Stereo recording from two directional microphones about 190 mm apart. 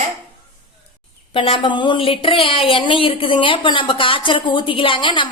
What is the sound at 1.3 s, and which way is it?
Speech, 25° left (ahead or behind).